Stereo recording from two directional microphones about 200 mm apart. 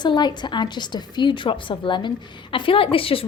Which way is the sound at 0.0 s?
20° left (ahead or behind).